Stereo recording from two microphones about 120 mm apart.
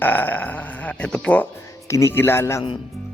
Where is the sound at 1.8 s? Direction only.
25° left (ahead or behind).